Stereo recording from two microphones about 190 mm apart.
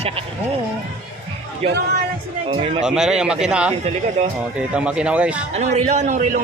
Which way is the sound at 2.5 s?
30° right (ahead or behind).